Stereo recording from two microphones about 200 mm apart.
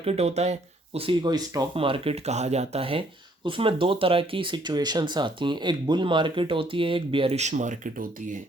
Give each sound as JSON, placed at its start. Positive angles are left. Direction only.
{"t": 0.0, "sound": "speech", "side_deg": -30}